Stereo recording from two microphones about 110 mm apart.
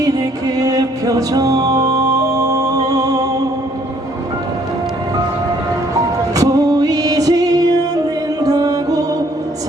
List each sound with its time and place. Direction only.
0.0 s music: 35° right (ahead or behind)
6.3 s music: 30° right (ahead or behind)